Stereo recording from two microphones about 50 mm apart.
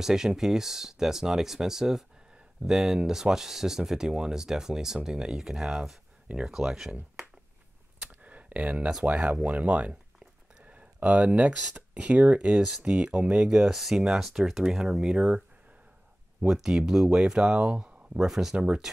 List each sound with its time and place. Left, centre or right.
0.0 s speech: centre
8.1 s a sound: right
9.0 s speech: right
10.7 s a sound: right
11.6 s speech: right
16.3 s speech: centre; by 18.2 s right
18.2 s speech: centre